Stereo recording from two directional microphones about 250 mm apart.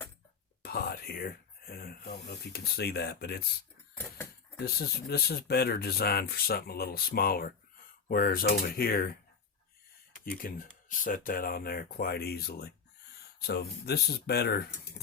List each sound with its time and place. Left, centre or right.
0.6 s speech: left
4.0 s a sound: centre
4.6 s speech: left
10.2 s speech: left